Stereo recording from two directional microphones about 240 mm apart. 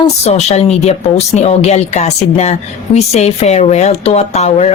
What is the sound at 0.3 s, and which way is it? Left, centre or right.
Speech, left.